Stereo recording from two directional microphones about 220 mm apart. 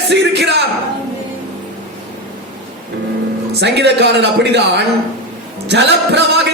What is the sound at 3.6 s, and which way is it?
A man's voice, 50° right (ahead or behind).